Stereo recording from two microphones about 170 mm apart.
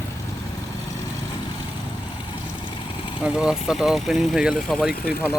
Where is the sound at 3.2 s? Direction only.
5° right (ahead or behind).